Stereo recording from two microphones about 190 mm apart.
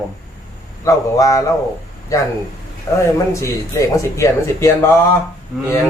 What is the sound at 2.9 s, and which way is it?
A man's voice, 10° left (ahead or behind).